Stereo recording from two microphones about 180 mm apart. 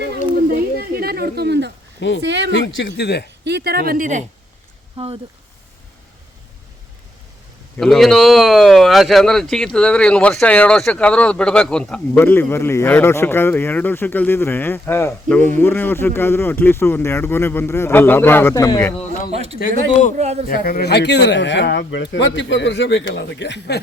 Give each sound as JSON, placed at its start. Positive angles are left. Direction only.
{"t": 0.8, "sound": "a sound", "side_deg": -60}
{"t": 2.0, "sound": "speech", "side_deg": 85}
{"t": 2.2, "sound": "speech", "side_deg": -75}
{"t": 2.7, "sound": "speech", "side_deg": 80}
{"t": 3.4, "sound": "speech", "side_deg": -65}
{"t": 4.9, "sound": "speech", "side_deg": -30}
{"t": 7.8, "sound": "speech", "side_deg": 0}
{"t": 19.5, "sound": "speech", "side_deg": 45}
{"t": 20.1, "sound": "speech", "side_deg": -40}
{"t": 20.5, "sound": "speech", "side_deg": 55}